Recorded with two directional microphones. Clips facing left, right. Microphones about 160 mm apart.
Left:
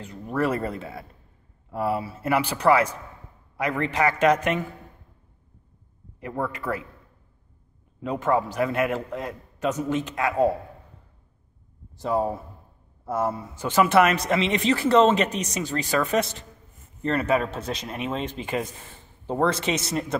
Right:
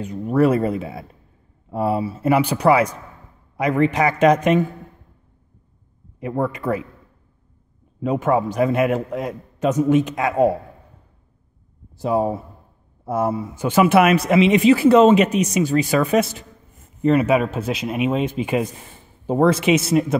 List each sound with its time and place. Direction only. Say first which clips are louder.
0.0 s speech: right 8 dB; 15° right (ahead or behind)
6.4 s speech: right 6 dB; 20° right (ahead or behind)
8.0 s speech: right 5 dB; 15° right (ahead or behind)
12.0 s speech: right 4 dB; 15° right (ahead or behind)